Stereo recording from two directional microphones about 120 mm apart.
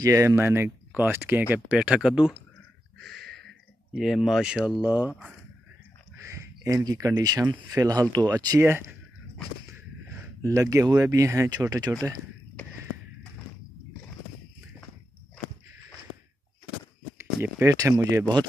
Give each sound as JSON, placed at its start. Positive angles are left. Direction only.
{"t": 0.0, "sound": "speech", "side_deg": -30}
{"t": 3.0, "sound": "a sound", "side_deg": 5}
{"t": 4.9, "sound": "speech", "side_deg": -15}
{"t": 6.2, "sound": "speech", "side_deg": -25}
{"t": 8.5, "sound": "speech", "side_deg": -20}
{"t": 10.4, "sound": "speech", "side_deg": -25}
{"t": 17.2, "sound": "speech", "side_deg": -20}